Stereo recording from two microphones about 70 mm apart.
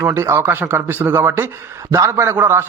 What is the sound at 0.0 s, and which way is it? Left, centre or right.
A man's voice, right.